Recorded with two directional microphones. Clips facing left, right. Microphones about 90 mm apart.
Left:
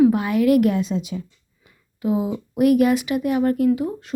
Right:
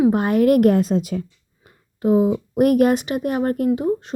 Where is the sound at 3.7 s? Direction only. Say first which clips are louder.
Right 1 dB; 30° right (ahead or behind).